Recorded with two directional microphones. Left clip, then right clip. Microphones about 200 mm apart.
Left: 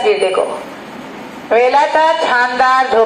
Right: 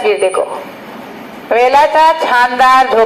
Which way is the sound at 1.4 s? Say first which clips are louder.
Right 2 dB; 55° right (ahead or behind).